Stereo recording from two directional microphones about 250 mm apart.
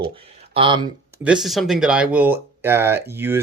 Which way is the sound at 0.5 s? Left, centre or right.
Centre.